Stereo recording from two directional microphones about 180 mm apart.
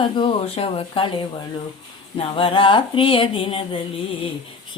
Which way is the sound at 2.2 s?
30° left (ahead or behind).